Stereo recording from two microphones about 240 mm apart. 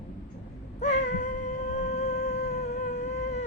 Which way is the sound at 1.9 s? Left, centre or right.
Left.